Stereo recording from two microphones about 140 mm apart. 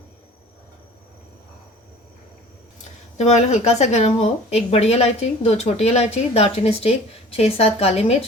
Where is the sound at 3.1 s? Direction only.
55° left (ahead or behind).